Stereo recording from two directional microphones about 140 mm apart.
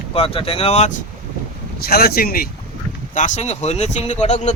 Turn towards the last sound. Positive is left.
turn(degrees=55)  # may be behind; listen again after turning